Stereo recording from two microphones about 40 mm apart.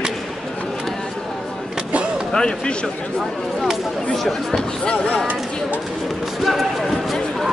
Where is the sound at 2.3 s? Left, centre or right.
Left.